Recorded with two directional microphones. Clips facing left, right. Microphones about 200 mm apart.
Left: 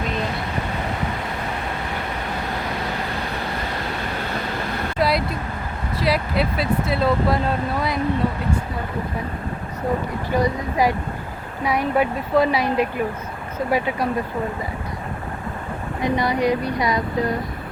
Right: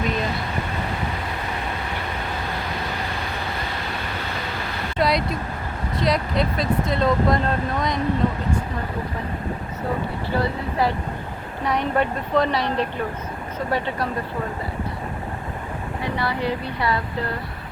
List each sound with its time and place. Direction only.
4.9 s vehicle: centre (ahead or behind)
6.0 s speech: 5° left (ahead or behind)
10.3 s speech: 15° left (ahead or behind)
16.0 s speech: 15° left (ahead or behind)